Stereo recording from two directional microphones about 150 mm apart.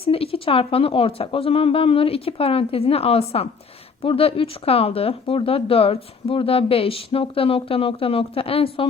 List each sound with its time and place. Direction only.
0.0 s speech: 40° left (ahead or behind)